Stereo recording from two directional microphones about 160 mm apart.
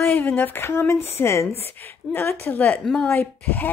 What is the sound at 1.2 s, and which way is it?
A woman's voice, 15° left (ahead or behind).